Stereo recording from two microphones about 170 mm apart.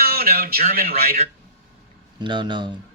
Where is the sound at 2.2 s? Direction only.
30° right (ahead or behind).